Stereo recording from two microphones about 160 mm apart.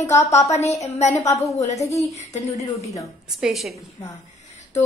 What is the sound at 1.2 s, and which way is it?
Speech, 20° left (ahead or behind).